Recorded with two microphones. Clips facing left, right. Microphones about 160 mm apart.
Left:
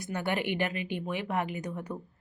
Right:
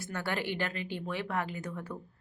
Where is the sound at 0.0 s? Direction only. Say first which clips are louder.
Left 3 dB; 20° left (ahead or behind).